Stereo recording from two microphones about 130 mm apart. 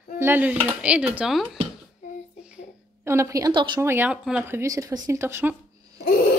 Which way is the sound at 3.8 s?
15° right (ahead or behind).